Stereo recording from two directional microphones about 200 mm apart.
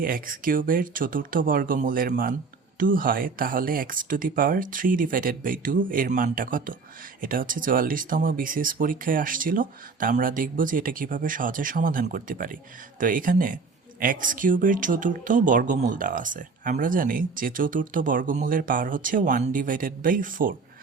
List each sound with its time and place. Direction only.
0.0 s speech: 45° right (ahead or behind)